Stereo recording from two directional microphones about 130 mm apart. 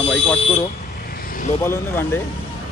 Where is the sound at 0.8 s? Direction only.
90° left.